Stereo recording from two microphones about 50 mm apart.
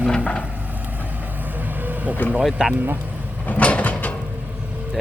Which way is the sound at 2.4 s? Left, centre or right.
Centre.